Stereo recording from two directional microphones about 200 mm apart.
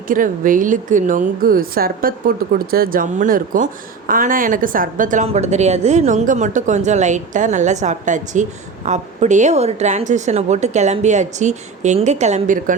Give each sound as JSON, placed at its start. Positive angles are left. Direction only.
{"t": 0.1, "sound": "a woman's voice", "side_deg": -40}